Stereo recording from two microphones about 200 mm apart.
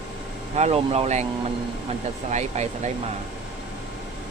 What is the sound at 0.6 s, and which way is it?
Speech, 30° right (ahead or behind).